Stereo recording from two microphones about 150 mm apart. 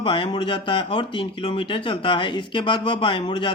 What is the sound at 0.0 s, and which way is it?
Speech, 35° left (ahead or behind).